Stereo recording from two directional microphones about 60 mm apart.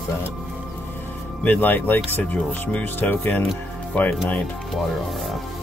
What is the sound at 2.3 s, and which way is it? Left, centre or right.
Speech, centre.